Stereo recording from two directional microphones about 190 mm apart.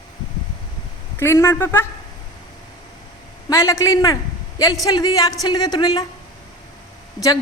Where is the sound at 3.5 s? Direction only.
15° left (ahead or behind).